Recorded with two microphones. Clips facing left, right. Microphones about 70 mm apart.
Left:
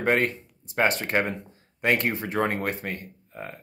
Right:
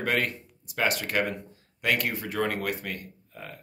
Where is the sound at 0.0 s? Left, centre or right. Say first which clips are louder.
Left 4 dB; left.